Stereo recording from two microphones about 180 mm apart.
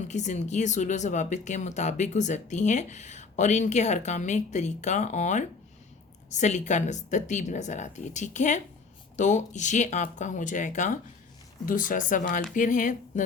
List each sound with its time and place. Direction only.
0.1 s speech: 40° left (ahead or behind)